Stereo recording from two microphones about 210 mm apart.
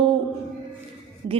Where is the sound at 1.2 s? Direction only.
60° right (ahead or behind).